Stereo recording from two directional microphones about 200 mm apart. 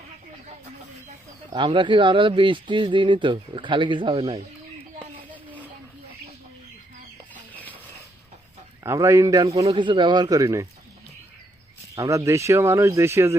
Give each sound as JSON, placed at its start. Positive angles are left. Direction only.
{"t": 1.5, "sound": "speech", "side_deg": -25}
{"t": 7.5, "sound": "chicken", "side_deg": 10}
{"t": 8.8, "sound": "speech", "side_deg": -15}
{"t": 11.9, "sound": "speech", "side_deg": -15}